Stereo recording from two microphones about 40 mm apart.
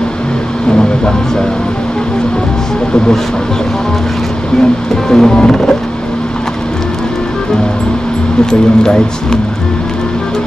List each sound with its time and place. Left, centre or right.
5.1 s speech: centre
8.5 s speech: centre